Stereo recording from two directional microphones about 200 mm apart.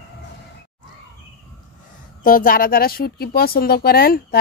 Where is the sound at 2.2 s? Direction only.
45° left (ahead or behind).